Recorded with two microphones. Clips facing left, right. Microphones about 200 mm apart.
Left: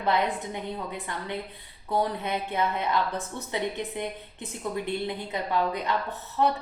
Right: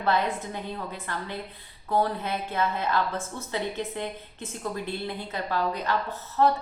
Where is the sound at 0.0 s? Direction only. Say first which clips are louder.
Even; 15° left (ahead or behind).